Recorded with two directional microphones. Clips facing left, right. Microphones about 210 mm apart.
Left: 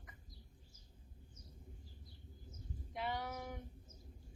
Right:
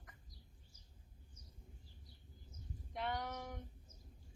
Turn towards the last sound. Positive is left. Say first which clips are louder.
# even
turn(degrees=5)  # may be behind; listen again after turning